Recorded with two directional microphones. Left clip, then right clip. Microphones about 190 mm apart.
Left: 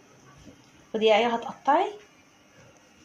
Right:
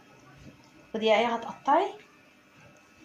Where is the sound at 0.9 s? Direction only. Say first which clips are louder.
Left 3 dB; 50° left (ahead or behind).